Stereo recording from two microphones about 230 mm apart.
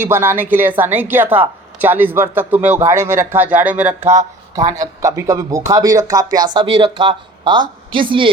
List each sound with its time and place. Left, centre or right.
0.0 s speech: centre
4.0 s speech: right
4.8 s a woman's voice: centre